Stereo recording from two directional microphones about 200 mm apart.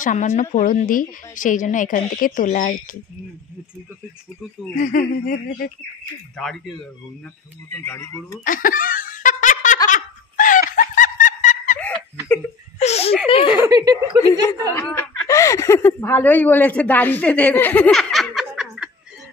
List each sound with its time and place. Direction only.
0.0 s a woman's voice: 40° left (ahead or behind)
4.7 s speech: 45° left (ahead or behind)
6.4 s speech: 5° left (ahead or behind)
7.8 s speech: 15° left (ahead or behind)
8.5 s snicker: 45° left (ahead or behind)
12.7 s speech: 35° left (ahead or behind)
13.5 s speech: 20° right (ahead or behind)
14.8 s speech: 10° left (ahead or behind)